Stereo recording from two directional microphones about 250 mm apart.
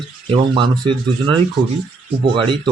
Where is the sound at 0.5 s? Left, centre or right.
Centre.